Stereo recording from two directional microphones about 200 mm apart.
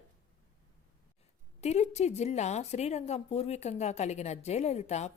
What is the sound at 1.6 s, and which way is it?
A woman's voice, 35° left (ahead or behind).